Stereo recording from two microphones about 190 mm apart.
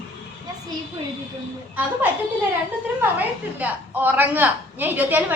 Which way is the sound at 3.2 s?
10° right (ahead or behind).